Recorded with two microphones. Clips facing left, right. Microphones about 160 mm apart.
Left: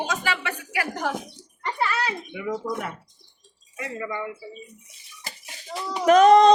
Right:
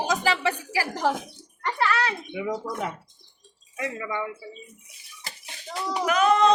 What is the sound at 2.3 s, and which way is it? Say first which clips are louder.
Speech: left 1 dB; 20° right (ahead or behind).